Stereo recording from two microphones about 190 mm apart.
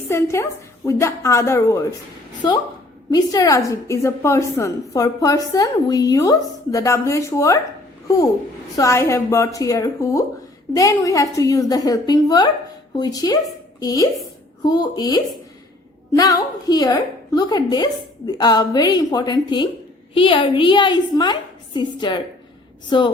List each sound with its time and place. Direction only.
0.1 s a woman's voice: 15° left (ahead or behind)
3.1 s a woman's voice: 20° left (ahead or behind)
8.7 s a woman's voice: 15° left (ahead or behind)